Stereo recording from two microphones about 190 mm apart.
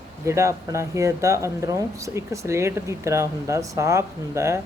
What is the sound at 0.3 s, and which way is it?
Speech, 15° right (ahead or behind).